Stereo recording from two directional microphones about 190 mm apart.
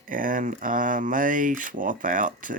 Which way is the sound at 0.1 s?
45° right (ahead or behind).